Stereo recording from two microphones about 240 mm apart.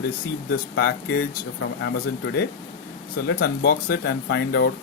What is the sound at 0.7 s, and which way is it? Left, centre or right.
Speech, left.